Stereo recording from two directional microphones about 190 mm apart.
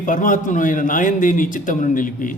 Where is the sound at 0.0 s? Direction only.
45° left (ahead or behind).